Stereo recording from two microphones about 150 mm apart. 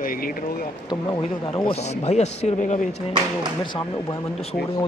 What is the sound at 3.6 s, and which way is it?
Speech, 30° left (ahead or behind).